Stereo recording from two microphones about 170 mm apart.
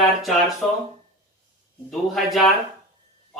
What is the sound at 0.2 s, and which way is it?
Speech, centre (ahead or behind).